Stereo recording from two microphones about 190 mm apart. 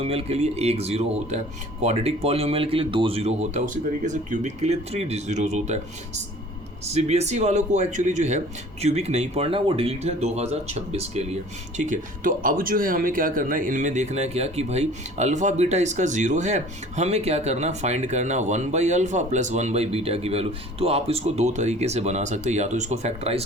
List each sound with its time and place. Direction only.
0.0 s a man's voice: 30° right (ahead or behind)
6.8 s a man's voice: 35° right (ahead or behind)